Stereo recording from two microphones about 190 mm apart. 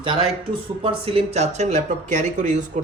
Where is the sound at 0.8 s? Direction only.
30° right (ahead or behind).